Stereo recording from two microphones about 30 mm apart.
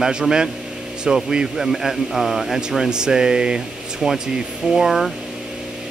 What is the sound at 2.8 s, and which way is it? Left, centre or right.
Speech, right.